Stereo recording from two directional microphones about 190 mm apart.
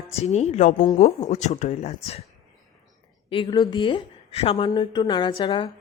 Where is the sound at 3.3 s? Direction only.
25° left (ahead or behind).